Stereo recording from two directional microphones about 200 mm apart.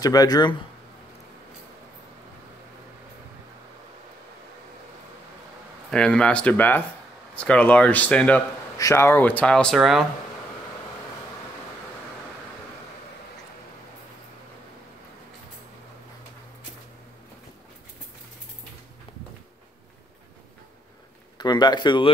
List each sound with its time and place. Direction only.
0.0 s speech: 20° left (ahead or behind)
5.9 s speech: 5° left (ahead or behind)
21.4 s speech: 20° left (ahead or behind)